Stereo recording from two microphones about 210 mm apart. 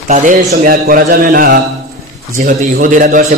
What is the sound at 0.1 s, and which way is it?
A man's voice, 35° right (ahead or behind).